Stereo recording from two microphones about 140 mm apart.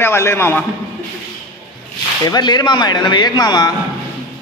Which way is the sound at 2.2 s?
30° left (ahead or behind).